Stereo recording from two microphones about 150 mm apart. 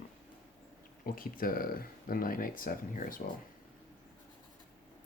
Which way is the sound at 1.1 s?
70° left (ahead or behind).